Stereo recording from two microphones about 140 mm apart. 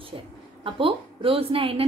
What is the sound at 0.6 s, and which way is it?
A woman's voice, 40° right (ahead or behind).